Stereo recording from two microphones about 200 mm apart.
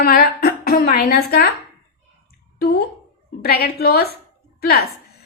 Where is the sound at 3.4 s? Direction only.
50° left (ahead or behind).